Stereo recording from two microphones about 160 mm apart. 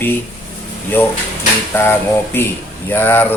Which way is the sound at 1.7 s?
15° left (ahead or behind).